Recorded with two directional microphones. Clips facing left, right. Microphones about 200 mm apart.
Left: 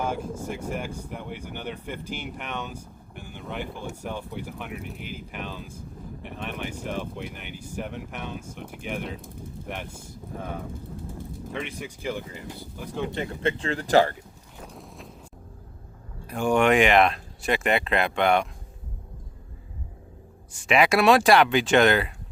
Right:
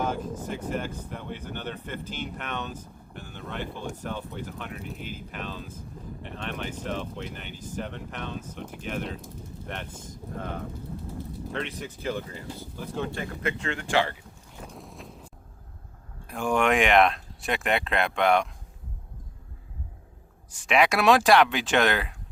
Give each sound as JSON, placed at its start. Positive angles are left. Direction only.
{"t": 0.0, "sound": "speech", "side_deg": 10}
{"t": 14.5, "sound": "vehicle", "side_deg": 0}
{"t": 16.2, "sound": "speech", "side_deg": 0}
{"t": 20.5, "sound": "speech", "side_deg": 0}